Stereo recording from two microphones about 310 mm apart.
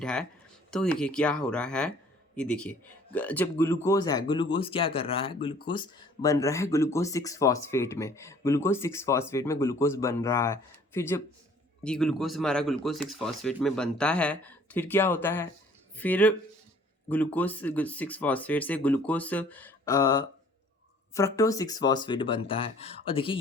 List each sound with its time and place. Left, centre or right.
0.0 s speech: centre